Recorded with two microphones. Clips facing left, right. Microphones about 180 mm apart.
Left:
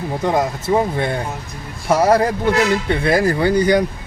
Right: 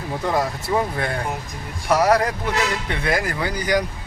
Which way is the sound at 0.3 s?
20° left (ahead or behind).